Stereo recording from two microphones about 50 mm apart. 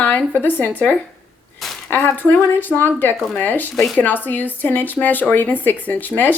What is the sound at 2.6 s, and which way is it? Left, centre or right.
A woman's voice, left.